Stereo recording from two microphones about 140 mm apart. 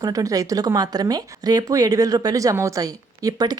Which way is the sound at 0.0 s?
25° right (ahead or behind).